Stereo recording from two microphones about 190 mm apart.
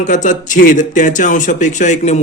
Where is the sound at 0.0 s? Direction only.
40° left (ahead or behind).